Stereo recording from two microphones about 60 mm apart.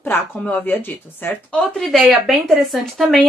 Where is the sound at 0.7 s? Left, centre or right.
Left.